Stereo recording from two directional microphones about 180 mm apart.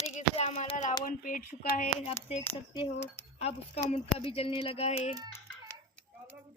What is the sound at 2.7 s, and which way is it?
Speech, 30° left (ahead or behind).